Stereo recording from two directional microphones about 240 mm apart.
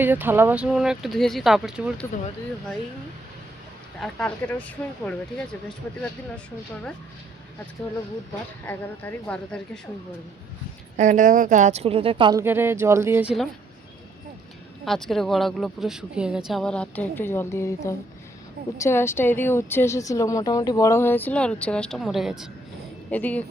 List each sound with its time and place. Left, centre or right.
0.0 s speech: centre
4.0 s speech: centre
8.6 s a woman's voice: centre
10.9 s speech: right; by 13.5 s centre
14.8 s a woman's voice: centre